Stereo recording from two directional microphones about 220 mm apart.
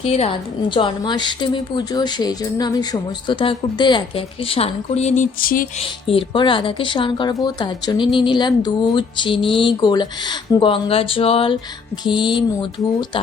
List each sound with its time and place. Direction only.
0.0 s speech: 25° left (ahead or behind)
5.8 s speech: 25° left (ahead or behind)